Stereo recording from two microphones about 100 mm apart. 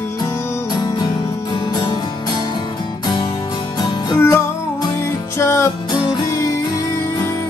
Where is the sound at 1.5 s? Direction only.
50° left (ahead or behind).